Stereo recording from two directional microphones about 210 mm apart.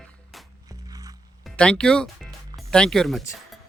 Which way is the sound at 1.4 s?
5° left (ahead or behind).